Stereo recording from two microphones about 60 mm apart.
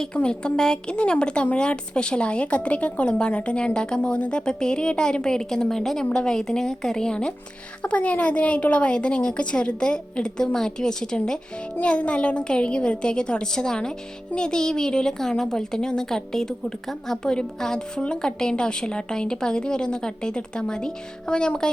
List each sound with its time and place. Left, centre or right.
0.0 s a woman's voice: centre